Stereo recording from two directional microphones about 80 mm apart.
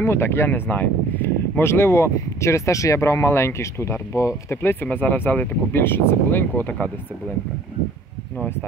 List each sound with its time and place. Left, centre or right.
0.0 s speech: left
4.8 s speech: left